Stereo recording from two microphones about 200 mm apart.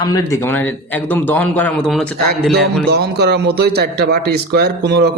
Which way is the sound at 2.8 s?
55° right (ahead or behind).